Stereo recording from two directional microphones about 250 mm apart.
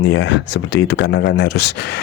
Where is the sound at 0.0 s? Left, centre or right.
Left.